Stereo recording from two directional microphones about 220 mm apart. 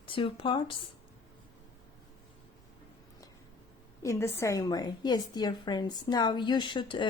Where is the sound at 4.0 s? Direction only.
15° left (ahead or behind).